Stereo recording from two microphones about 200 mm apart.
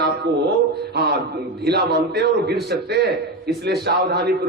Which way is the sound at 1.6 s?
55° right (ahead or behind).